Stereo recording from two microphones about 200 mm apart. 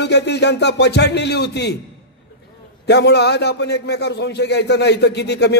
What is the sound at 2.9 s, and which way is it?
Speech, 55° left (ahead or behind).